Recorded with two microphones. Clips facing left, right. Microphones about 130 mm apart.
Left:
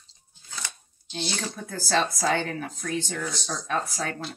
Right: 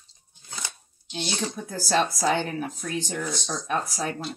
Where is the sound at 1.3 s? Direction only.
15° right (ahead or behind).